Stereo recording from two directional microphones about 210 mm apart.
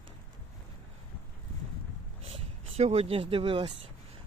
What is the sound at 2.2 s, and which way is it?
Speech, 30° right (ahead or behind).